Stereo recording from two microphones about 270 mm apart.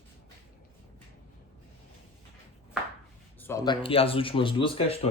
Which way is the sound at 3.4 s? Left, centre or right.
Centre.